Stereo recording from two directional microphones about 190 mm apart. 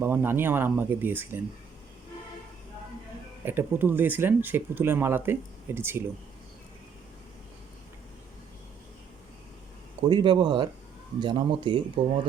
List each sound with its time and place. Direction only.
0.0 s speech: 10° right (ahead or behind)
3.4 s speech: 10° right (ahead or behind)
10.1 s speech: 25° right (ahead or behind)